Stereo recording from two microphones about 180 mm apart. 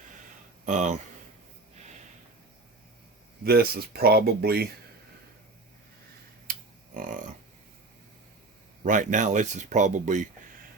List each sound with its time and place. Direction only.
0.6 s speech: 40° right (ahead or behind)
3.4 s speech: 60° right (ahead or behind)
6.5 s a sound: 50° right (ahead or behind)
8.8 s speech: 45° right (ahead or behind)